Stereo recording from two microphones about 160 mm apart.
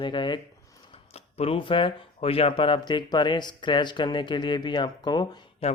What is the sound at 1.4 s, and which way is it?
Speech, 35° left (ahead or behind).